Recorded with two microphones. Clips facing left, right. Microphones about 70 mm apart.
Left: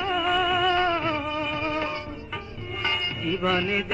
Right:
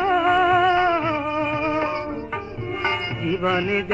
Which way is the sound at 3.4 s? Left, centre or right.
Centre.